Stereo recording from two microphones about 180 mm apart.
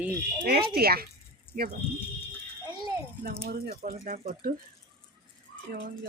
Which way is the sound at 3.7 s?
50° right (ahead or behind).